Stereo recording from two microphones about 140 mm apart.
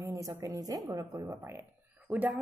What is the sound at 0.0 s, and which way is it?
A woman's voice, 20° right (ahead or behind).